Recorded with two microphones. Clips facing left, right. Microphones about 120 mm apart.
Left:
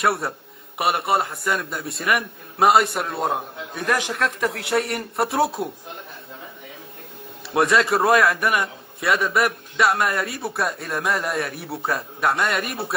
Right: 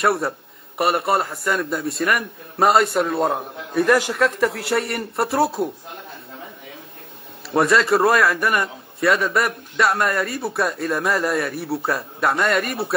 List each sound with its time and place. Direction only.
0.0 s a man's voice: centre (ahead or behind)
7.5 s a man's voice: centre (ahead or behind)